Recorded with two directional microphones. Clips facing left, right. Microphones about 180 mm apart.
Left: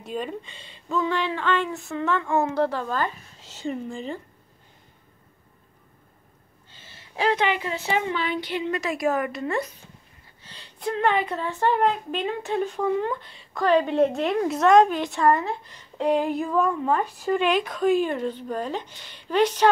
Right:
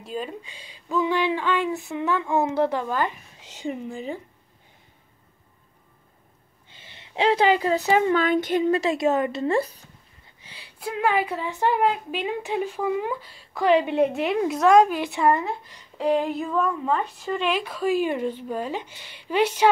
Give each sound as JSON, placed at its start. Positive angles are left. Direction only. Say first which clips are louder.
{"t": 0.0, "sound": "speech", "louder": "left 1 dB", "side_deg": 0}
{"t": 6.7, "sound": "a woman's voice", "louder": "right 4 dB", "side_deg": -15}
{"t": 8.7, "sound": "speech", "louder": "right 3 dB", "side_deg": -25}
{"t": 10.4, "sound": "speech", "louder": "left 3 dB", "side_deg": -10}
{"t": 13.6, "sound": "speech", "louder": "even", "side_deg": -15}
{"t": 16.0, "sound": "a sound", "louder": "even", "side_deg": 0}
{"t": 17.2, "sound": "speech", "louder": "left 3 dB", "side_deg": 0}